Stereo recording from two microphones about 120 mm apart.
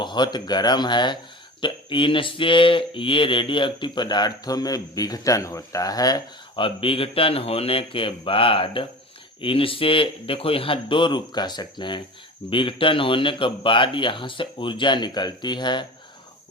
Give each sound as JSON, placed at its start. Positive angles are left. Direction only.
{"t": 0.0, "sound": "speech", "side_deg": 40}
{"t": 6.6, "sound": "speech", "side_deg": 50}